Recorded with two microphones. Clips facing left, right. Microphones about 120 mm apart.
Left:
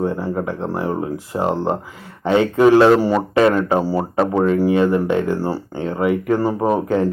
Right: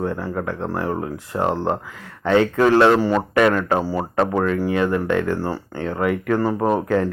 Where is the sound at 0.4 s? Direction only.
5° left (ahead or behind).